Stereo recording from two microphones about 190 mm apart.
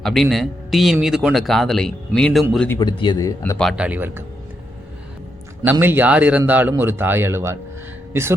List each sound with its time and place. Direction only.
0.0 s speech: centre (ahead or behind)
2.6 s speech: 20° left (ahead or behind)
3.6 s speech: 5° right (ahead or behind)
5.8 s speech: 10° right (ahead or behind)